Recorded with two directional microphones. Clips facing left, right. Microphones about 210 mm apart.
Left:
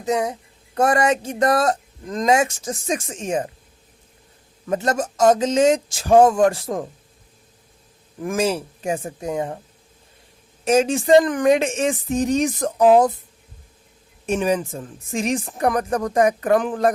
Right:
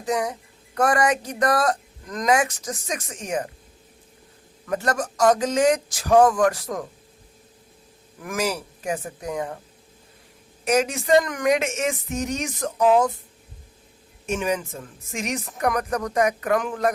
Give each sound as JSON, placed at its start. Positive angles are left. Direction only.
{"t": 0.0, "sound": "speech", "side_deg": 25}
{"t": 4.6, "sound": "speech", "side_deg": 25}
{"t": 8.2, "sound": "speech", "side_deg": 25}
{"t": 10.7, "sound": "speech", "side_deg": 30}
{"t": 14.3, "sound": "speech", "side_deg": 35}